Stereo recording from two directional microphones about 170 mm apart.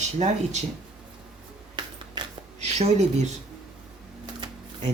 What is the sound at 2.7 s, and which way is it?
Speech, 40° right (ahead or behind).